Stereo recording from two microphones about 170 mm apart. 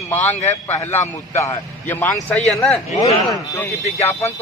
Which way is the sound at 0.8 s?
45° left (ahead or behind).